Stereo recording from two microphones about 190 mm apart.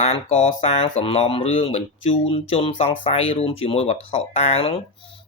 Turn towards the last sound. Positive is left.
turn(degrees=30)  # may be behind; listen again after turning